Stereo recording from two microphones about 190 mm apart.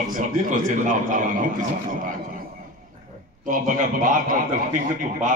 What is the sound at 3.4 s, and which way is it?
A man's voice, 45° right (ahead or behind).